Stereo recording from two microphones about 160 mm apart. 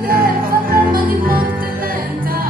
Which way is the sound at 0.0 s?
65° right (ahead or behind).